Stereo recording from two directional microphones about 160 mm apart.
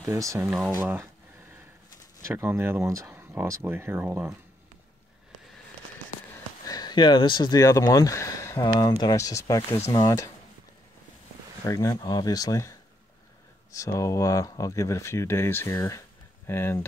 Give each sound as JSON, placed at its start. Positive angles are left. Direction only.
{"t": 0.1, "sound": "speech", "side_deg": -20}
{"t": 0.4, "sound": "speech", "side_deg": -5}
{"t": 0.7, "sound": "speech", "side_deg": -15}
{"t": 2.2, "sound": "speech", "side_deg": -15}
{"t": 6.3, "sound": "speech", "side_deg": 25}
{"t": 11.6, "sound": "speech", "side_deg": 20}